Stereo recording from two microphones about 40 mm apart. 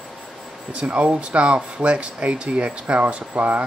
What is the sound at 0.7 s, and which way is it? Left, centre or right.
Speech, right.